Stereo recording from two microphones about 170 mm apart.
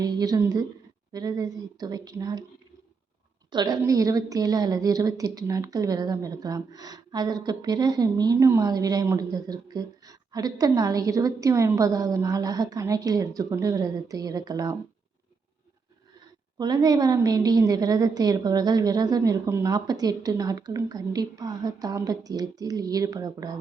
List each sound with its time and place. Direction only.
0.0 s a woman's voice: 25° right (ahead or behind)
3.5 s a woman's voice: 25° right (ahead or behind)
16.6 s a woman's voice: 25° right (ahead or behind)